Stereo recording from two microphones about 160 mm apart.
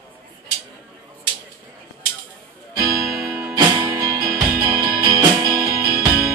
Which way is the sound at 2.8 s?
20° right (ahead or behind).